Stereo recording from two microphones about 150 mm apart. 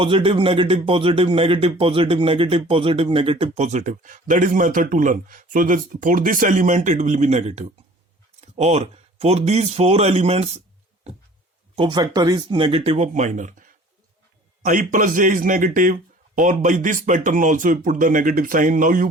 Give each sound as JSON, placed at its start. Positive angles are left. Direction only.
{"t": 0.0, "sound": "a man's voice", "side_deg": -35}
{"t": 11.8, "sound": "a man's voice", "side_deg": -30}